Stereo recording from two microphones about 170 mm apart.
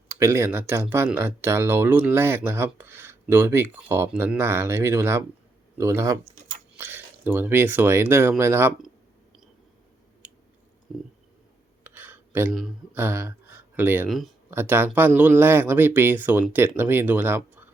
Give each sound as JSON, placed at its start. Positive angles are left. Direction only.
{"t": 0.1, "sound": "speech", "side_deg": -15}
{"t": 6.2, "sound": "speech", "side_deg": -45}
{"t": 6.7, "sound": "speech", "side_deg": -15}
{"t": 10.9, "sound": "speech", "side_deg": 0}
{"t": 11.8, "sound": "a sound", "side_deg": -10}
{"t": 12.9, "sound": "speech", "side_deg": -15}
{"t": 14.1, "sound": "speech", "side_deg": 0}
{"t": 14.5, "sound": "speech", "side_deg": -15}